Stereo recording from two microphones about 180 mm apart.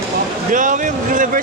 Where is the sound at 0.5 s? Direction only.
45° right (ahead or behind).